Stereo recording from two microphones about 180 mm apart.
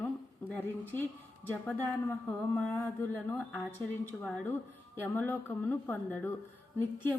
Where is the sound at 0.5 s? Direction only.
10° left (ahead or behind).